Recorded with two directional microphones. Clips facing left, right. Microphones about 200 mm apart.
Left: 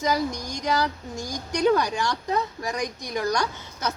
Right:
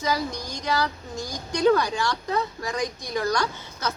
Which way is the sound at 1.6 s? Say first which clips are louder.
Right 1 dB; 20° left (ahead or behind).